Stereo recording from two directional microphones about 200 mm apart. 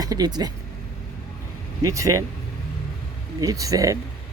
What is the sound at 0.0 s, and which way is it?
Speech, 20° right (ahead or behind).